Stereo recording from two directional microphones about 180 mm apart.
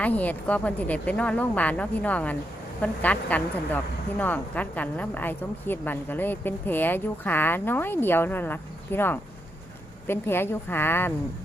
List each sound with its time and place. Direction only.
0.0 s a woman's voice: 10° left (ahead or behind)